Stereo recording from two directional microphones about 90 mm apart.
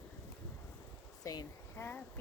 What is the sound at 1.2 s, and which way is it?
Speech, 40° left (ahead or behind).